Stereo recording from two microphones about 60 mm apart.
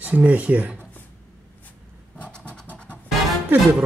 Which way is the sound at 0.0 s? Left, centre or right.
Right.